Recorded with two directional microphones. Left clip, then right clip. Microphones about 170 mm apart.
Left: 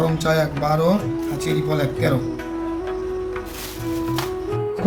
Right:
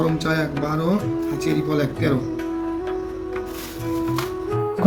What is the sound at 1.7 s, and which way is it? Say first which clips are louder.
Speech: left 1 dB; 80° left.